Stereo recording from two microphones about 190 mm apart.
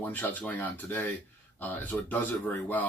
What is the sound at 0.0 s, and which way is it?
Speech, 10° left (ahead or behind).